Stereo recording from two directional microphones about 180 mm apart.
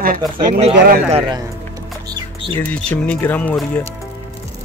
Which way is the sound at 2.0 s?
25° right (ahead or behind).